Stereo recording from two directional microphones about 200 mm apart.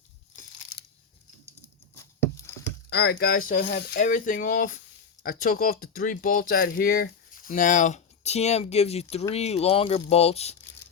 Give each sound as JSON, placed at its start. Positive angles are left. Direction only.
{"t": 0.4, "sound": "crushing", "side_deg": 40}
{"t": 2.9, "sound": "speech", "side_deg": 55}